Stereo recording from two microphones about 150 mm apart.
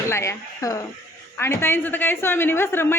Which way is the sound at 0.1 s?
20° left (ahead or behind).